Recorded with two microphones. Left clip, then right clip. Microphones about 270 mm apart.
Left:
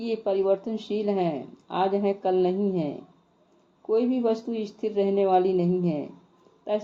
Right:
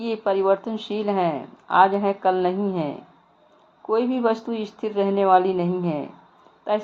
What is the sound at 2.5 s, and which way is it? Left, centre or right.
Speech, right.